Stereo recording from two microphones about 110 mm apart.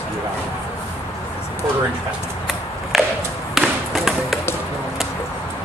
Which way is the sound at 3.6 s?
Centre (ahead or behind).